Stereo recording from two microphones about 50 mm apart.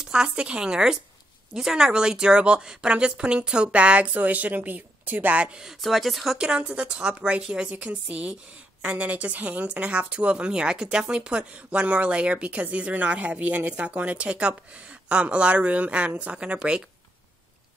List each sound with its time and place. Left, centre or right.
0.0 s a woman's voice: centre
5.8 s speech: centre
6.3 s a woman's voice: centre